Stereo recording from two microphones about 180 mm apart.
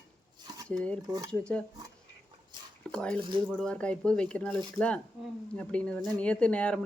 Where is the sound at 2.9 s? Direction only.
5° left (ahead or behind).